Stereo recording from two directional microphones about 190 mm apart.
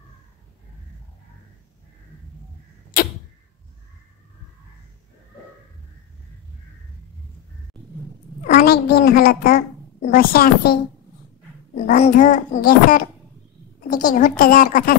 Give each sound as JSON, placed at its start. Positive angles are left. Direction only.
{"t": 2.9, "sound": "a sound", "side_deg": 45}
{"t": 8.5, "sound": "a child's voice", "side_deg": 50}
{"t": 12.0, "sound": "speech", "side_deg": 45}
{"t": 14.0, "sound": "speech", "side_deg": 45}